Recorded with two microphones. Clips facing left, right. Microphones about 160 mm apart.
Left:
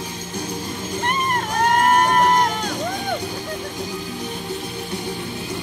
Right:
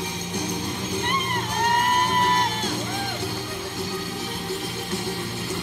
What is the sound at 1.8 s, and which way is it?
Music, 55° left (ahead or behind).